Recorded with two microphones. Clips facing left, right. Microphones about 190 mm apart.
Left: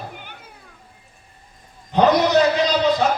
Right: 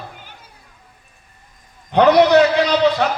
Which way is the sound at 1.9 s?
65° right (ahead or behind).